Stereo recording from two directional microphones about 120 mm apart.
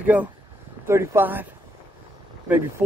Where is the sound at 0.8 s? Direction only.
20° right (ahead or behind).